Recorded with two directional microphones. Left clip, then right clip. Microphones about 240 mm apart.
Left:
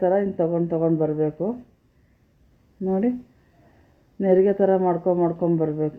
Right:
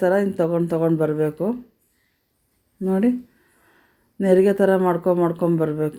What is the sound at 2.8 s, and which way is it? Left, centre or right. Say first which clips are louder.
Speech: right 2 dB; centre.